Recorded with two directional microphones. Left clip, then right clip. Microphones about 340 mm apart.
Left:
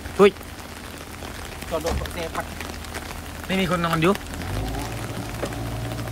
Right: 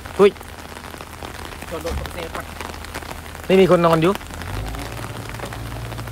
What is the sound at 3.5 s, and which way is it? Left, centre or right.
Speech, centre.